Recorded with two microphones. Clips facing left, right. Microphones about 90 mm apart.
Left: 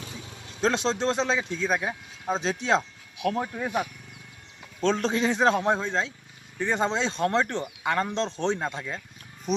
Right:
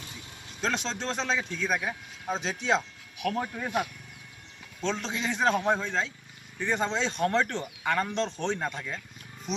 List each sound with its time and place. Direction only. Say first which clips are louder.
0.6 s speech: left 6 dB; 25° left (ahead or behind)
2.3 s a man's voice: left 3 dB; 35° left (ahead or behind)
3.2 s speech: left 3 dB; 20° left (ahead or behind)
3.4 s speech: left 2 dB; 5° left (ahead or behind)
4.8 s a man's voice: left 7 dB; 45° left (ahead or behind); by 8.8 s 25° left (ahead or behind)
9.5 s speech: left 6 dB; 45° left (ahead or behind)